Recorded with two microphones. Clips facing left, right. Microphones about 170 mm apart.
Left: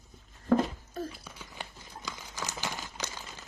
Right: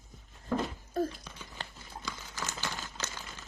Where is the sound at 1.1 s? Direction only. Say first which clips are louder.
Even; 10° left (ahead or behind).